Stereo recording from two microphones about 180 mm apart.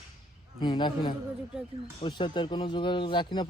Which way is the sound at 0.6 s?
25° left (ahead or behind).